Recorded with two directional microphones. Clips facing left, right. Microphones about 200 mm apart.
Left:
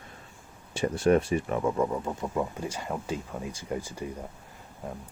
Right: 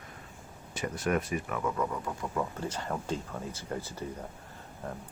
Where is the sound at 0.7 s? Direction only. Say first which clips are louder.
Left 7 dB; 30° left (ahead or behind); by 4.1 s 15° left (ahead or behind).